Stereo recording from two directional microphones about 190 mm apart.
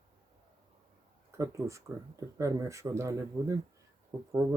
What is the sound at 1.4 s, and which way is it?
Speech, 15° right (ahead or behind).